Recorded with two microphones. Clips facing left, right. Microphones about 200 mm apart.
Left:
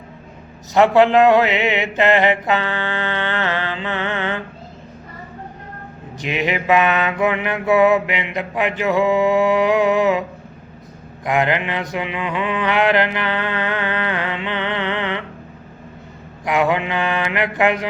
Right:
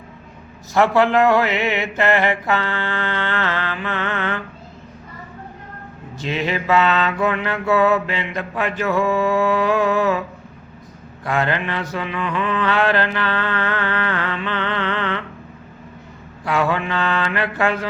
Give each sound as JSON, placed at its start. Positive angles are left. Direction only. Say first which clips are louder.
{"t": 0.7, "sound": "mantra", "louder": "left 3 dB", "side_deg": 20}
{"t": 6.1, "sound": "mantra", "louder": "left 1 dB", "side_deg": 15}
{"t": 11.3, "sound": "mantra", "louder": "left 2 dB", "side_deg": 15}
{"t": 16.4, "sound": "mantra", "louder": "left 2 dB", "side_deg": 15}